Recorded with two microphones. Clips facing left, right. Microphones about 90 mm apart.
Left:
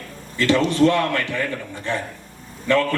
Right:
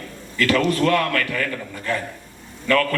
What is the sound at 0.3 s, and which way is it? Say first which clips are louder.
A man's voice: left 2 dB; 25° left (ahead or behind).